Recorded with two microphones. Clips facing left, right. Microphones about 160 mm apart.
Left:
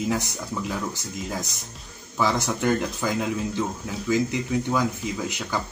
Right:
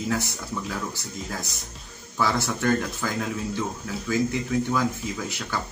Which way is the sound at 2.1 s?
15° left (ahead or behind).